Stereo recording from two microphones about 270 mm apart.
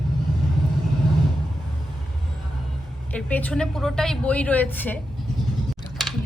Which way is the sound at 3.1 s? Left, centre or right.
Centre.